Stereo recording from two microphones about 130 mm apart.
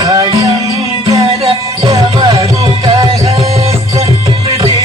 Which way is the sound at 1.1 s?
45° right (ahead or behind).